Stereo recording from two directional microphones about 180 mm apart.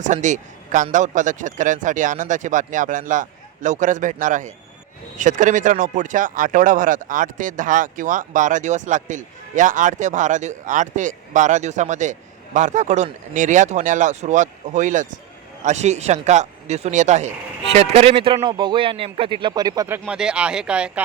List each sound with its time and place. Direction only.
0.0 s a man's voice: 45° right (ahead or behind); by 20.0 s 20° right (ahead or behind)
20.1 s speech: 5° right (ahead or behind)